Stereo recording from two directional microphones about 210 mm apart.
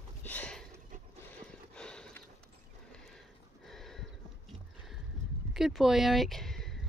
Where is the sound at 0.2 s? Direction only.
10° left (ahead or behind).